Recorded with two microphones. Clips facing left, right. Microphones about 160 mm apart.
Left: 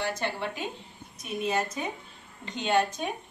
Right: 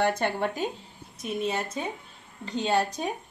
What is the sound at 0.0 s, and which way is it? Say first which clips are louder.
Speech: right 6 dB; 55° right (ahead or behind).